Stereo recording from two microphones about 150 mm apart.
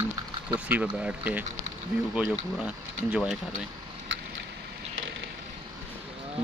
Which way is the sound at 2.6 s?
5° right (ahead or behind).